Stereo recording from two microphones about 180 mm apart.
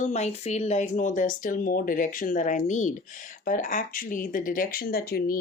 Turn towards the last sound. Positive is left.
turn(degrees=60)  # may be behind; listen again after turning